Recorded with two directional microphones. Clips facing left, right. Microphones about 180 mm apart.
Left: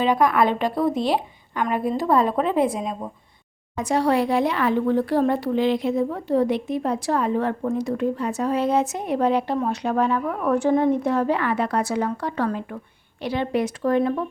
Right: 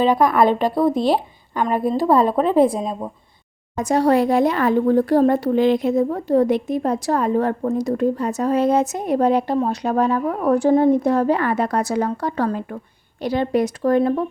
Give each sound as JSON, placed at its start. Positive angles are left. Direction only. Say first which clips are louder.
{"t": 0.0, "sound": "a woman's voice", "louder": "right 3 dB", "side_deg": -35}
{"t": 3.8, "sound": "a woman's voice", "louder": "right 4 dB", "side_deg": -45}